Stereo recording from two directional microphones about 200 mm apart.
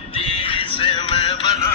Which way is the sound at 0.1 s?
25° left (ahead or behind).